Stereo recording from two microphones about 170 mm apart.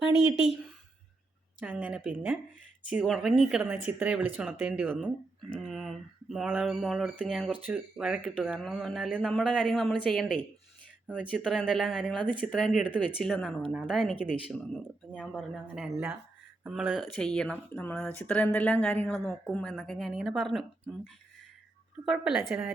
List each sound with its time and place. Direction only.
1.6 s speech: 10° right (ahead or behind)
11.4 s speech: 5° right (ahead or behind)
15.9 s speech: 10° right (ahead or behind)